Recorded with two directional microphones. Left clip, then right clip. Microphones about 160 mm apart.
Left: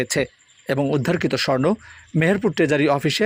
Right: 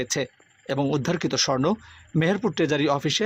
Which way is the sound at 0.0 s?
15° left (ahead or behind).